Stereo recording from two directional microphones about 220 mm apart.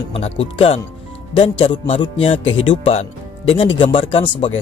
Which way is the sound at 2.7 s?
25° left (ahead or behind).